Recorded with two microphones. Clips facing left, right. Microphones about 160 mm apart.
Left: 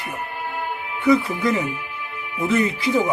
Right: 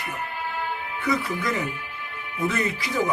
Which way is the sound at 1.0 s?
25° left (ahead or behind).